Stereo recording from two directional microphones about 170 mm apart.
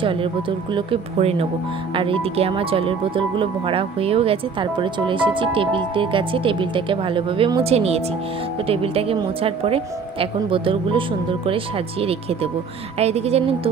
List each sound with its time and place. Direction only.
0.7 s speech: 35° right (ahead or behind)